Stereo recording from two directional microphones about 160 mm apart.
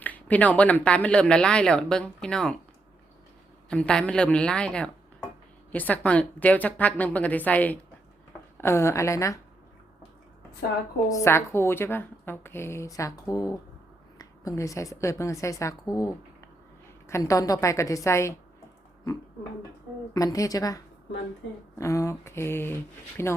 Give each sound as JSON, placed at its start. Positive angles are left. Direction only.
{"t": 0.0, "sound": "speech", "side_deg": 10}
{"t": 3.7, "sound": "a woman's voice", "side_deg": 5}
{"t": 11.1, "sound": "a woman's voice", "side_deg": 15}
{"t": 17.1, "sound": "a woman's voice", "side_deg": 20}
{"t": 20.1, "sound": "a woman's voice", "side_deg": 20}